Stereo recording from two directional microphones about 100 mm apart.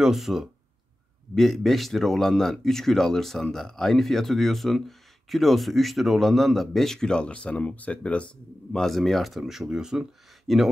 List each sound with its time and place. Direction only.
0.0 s speech: centre (ahead or behind)